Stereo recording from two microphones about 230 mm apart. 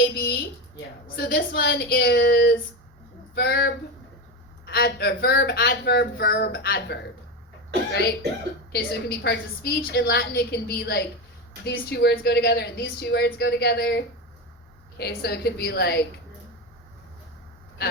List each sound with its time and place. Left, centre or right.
0.0 s a sound: left
1.0 s speech: left
8.7 s speech: left